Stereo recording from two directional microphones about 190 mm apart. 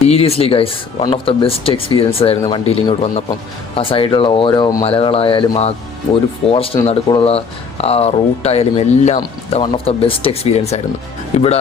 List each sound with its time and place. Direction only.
0.0 s speech: 35° left (ahead or behind)